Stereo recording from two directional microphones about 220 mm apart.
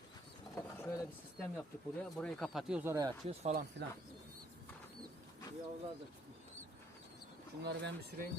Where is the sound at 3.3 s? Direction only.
30° right (ahead or behind).